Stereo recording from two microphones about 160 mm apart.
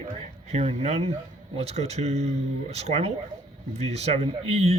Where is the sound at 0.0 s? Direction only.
45° right (ahead or behind).